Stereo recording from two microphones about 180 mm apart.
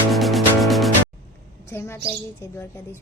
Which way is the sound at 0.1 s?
Centre (ahead or behind).